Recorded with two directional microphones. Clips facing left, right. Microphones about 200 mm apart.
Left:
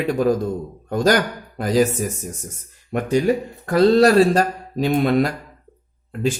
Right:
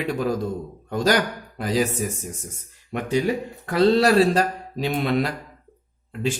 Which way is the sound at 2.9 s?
45° left (ahead or behind).